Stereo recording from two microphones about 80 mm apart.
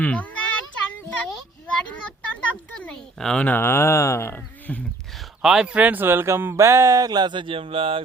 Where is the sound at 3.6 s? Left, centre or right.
Left.